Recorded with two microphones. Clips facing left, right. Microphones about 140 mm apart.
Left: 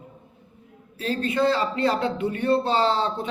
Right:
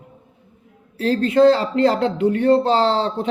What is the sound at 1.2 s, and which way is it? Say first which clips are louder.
A man's voice: right 8 dB; 90° right.